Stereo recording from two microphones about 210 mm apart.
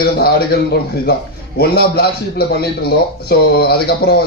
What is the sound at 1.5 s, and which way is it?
A man's voice, 50° left (ahead or behind).